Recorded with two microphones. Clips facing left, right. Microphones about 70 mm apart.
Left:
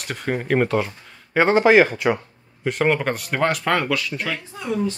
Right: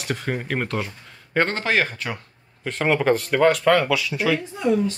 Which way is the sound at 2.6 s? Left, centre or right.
Centre.